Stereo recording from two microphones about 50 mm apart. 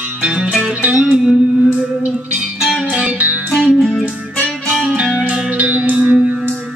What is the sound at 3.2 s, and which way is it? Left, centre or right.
Music, right.